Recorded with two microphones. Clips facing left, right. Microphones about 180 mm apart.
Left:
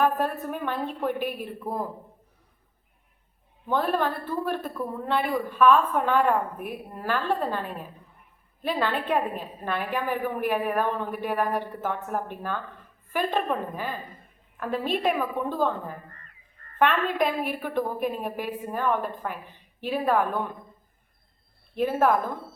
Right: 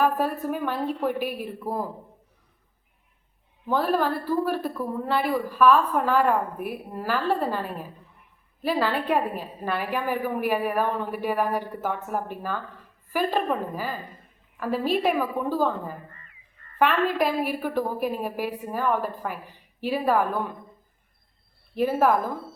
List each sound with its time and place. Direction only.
0.0 s a woman's voice: 5° right (ahead or behind)
3.7 s a woman's voice: 5° right (ahead or behind)
16.0 s a sound: 45° left (ahead or behind)
16.7 s a woman's voice: 5° right (ahead or behind)
21.8 s speech: 5° right (ahead or behind)